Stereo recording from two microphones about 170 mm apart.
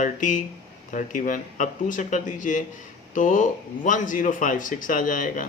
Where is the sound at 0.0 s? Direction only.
50° left (ahead or behind).